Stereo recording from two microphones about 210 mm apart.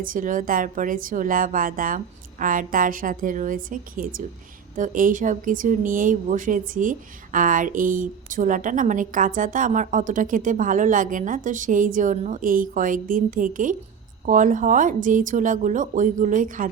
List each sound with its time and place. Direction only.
0.0 s a woman's voice: 40° right (ahead or behind)